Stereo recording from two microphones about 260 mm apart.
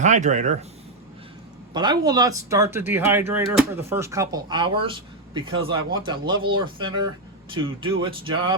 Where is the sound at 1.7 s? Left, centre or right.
Centre.